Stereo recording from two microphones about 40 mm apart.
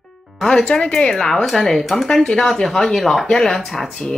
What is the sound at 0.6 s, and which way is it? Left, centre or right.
Speech, left.